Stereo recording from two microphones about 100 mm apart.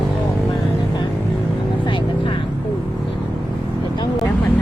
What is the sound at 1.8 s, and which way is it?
Vehicle, 55° left (ahead or behind).